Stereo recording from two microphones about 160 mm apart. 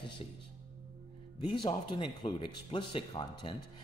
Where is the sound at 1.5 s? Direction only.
30° left (ahead or behind).